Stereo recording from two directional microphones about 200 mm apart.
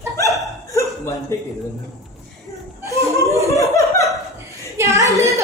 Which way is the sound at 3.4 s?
15° left (ahead or behind).